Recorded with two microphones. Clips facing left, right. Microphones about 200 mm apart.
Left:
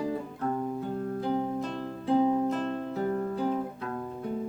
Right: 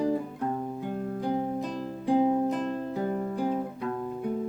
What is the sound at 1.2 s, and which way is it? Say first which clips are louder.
Music: right 1 dB; 15° right (ahead or behind).